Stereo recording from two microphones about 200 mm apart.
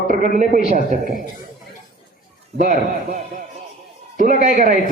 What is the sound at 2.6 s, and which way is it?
Speech, 45° right (ahead or behind).